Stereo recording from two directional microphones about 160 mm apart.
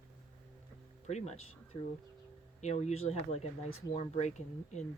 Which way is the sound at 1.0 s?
45° left (ahead or behind).